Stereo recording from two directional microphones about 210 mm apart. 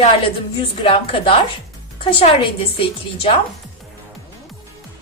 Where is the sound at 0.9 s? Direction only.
25° left (ahead or behind).